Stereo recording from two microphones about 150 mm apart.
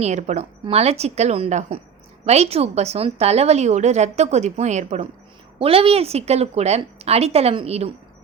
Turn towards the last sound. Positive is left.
turn(degrees=-45)  # may be behind; listen again after turning